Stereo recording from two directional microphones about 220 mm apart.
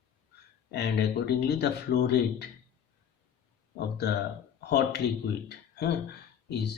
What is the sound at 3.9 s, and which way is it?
Speech, 50° left (ahead or behind).